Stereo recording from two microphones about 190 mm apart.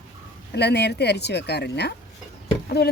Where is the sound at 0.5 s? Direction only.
60° left (ahead or behind).